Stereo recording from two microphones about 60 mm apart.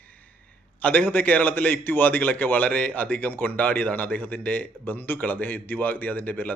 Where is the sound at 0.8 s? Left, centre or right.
Left.